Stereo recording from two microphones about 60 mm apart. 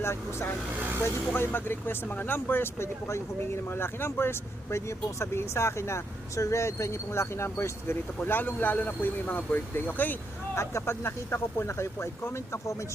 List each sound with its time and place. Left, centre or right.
0.0 s speech: left
8.2 s speech: left
10.5 s speech: left